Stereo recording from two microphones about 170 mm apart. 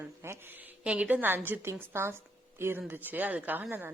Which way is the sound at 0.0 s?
15° right (ahead or behind).